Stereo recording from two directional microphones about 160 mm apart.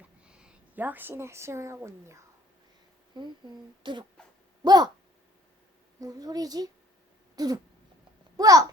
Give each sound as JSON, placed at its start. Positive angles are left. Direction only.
{"t": 0.3, "sound": "a woman's voice", "side_deg": -5}
{"t": 3.1, "sound": "a woman's voice", "side_deg": -30}
{"t": 6.0, "sound": "a woman's voice", "side_deg": -25}
{"t": 7.3, "sound": "cat", "side_deg": -25}
{"t": 8.4, "sound": "a child's voice", "side_deg": -20}